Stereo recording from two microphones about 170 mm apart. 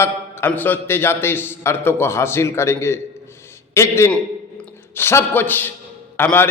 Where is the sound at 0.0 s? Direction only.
10° left (ahead or behind).